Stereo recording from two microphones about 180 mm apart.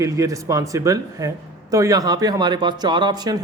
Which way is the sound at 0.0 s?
20° right (ahead or behind).